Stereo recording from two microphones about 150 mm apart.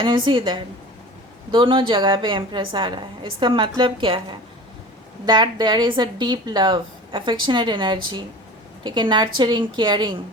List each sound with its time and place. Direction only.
0.0 s a woman's voice: 35° right (ahead or behind)